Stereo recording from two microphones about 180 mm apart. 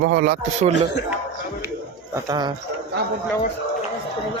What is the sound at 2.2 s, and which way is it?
Speech, 20° right (ahead or behind).